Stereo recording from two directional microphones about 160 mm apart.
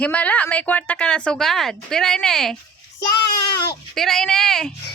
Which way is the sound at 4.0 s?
Centre (ahead or behind).